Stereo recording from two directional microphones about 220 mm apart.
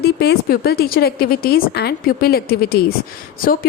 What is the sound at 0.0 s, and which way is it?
A woman's voice, 45° left (ahead or behind).